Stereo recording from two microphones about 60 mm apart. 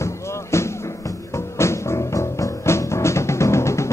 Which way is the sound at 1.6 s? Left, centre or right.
Left.